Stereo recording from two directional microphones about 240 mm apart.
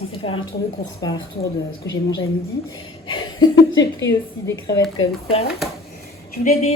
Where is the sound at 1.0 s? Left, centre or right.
Left.